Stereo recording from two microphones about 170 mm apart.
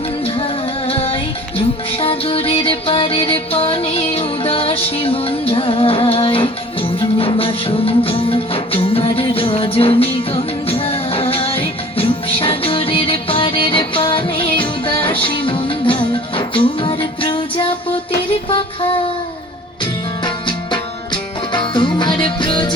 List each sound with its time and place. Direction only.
0.3 s music: 35° left (ahead or behind)